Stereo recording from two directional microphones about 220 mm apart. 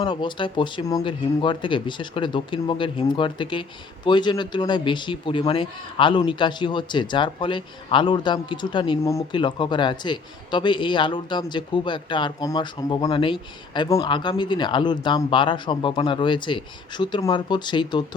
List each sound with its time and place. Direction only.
0.0 s speech: 20° left (ahead or behind)